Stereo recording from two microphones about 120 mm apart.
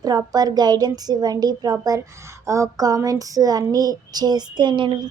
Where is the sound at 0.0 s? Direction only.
30° right (ahead or behind).